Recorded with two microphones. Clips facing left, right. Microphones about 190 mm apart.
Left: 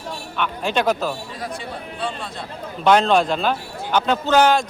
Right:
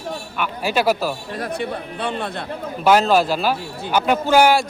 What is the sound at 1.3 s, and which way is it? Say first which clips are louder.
A man's voice: right 5 dB; 60° right (ahead or behind).